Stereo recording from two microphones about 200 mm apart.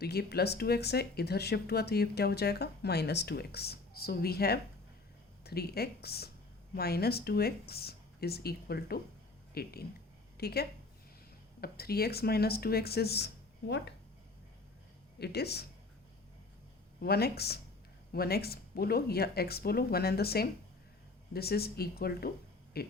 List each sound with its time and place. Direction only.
0.0 s a woman's voice: 55° left (ahead or behind)
15.2 s speech: 55° left (ahead or behind)
17.0 s speech: 50° left (ahead or behind)